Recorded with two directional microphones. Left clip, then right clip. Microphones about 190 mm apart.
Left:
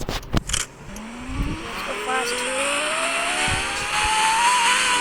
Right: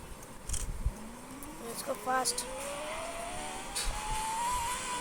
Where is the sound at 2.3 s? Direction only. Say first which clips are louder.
Left 15 dB; 40° left (ahead or behind).